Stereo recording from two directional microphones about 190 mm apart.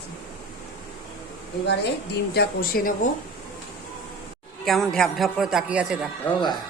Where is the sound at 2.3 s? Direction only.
55° left (ahead or behind).